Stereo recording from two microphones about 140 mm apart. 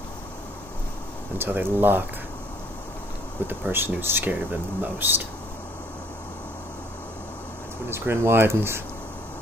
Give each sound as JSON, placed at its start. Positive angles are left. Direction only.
{"t": 1.4, "sound": "speech", "side_deg": -15}
{"t": 3.4, "sound": "speech", "side_deg": -15}
{"t": 7.9, "sound": "speech", "side_deg": -15}